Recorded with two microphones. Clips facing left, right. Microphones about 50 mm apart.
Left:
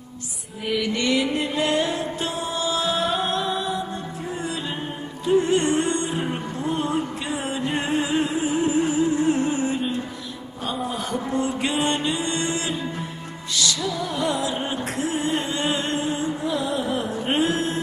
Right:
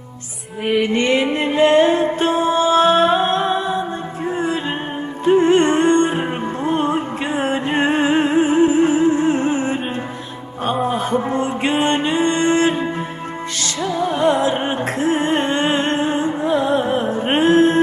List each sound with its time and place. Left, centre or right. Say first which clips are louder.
0.7 s music: right 6 dB; right
5.2 s music: right 6 dB; right